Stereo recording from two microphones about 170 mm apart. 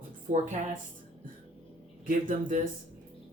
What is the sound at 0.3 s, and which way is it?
Speech, 50° right (ahead or behind).